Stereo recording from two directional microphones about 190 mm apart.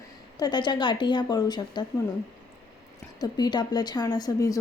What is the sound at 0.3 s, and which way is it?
A woman's voice, 20° left (ahead or behind).